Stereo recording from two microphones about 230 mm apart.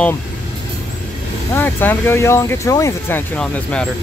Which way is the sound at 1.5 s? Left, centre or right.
Centre.